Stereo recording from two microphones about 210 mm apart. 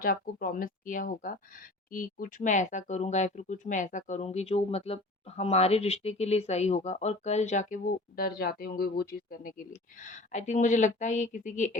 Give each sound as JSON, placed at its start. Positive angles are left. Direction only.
{"t": 0.0, "sound": "speech", "side_deg": 45}